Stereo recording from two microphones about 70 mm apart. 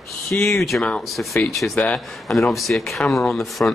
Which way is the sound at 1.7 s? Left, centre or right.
Centre.